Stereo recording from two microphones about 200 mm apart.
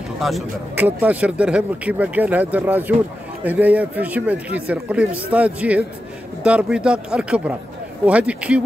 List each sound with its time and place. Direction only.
0.2 s a man's voice: 5° right (ahead or behind)